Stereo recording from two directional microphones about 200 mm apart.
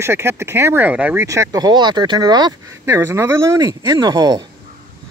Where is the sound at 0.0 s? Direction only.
10° right (ahead or behind).